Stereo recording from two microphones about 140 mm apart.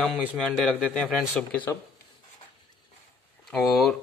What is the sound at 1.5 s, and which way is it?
Speech, 10° left (ahead or behind).